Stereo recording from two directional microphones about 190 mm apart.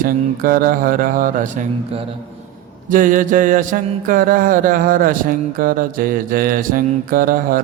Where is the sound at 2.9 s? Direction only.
45° right (ahead or behind).